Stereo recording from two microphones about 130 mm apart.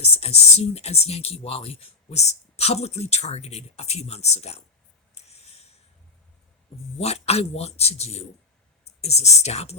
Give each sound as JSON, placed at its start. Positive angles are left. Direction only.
{"t": 0.2, "sound": "speech", "side_deg": 50}
{"t": 5.1, "sound": "a sound", "side_deg": 55}
{"t": 7.0, "sound": "speech", "side_deg": 55}